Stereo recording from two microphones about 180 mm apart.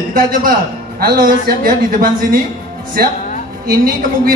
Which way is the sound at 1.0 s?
50° right (ahead or behind).